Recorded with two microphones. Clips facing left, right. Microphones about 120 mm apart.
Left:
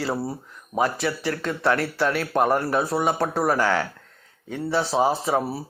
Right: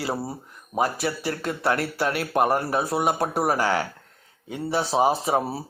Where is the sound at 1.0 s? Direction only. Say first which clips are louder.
Left 1 dB; 35° right (ahead or behind).